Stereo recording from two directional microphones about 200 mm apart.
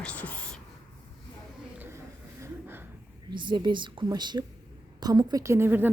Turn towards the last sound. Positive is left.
turn(degrees=-10)  # may be behind; listen again after turning